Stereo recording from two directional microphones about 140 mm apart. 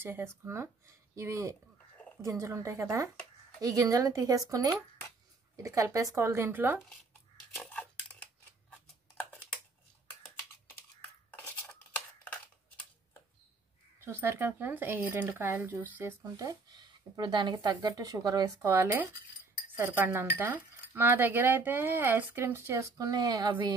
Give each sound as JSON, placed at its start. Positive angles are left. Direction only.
{"t": 0.0, "sound": "speech", "side_deg": -15}
{"t": 7.5, "sound": "a sound", "side_deg": 5}
{"t": 14.0, "sound": "speech", "side_deg": -20}